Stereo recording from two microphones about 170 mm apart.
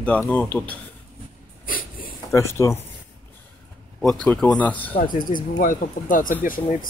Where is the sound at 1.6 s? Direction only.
55° left (ahead or behind).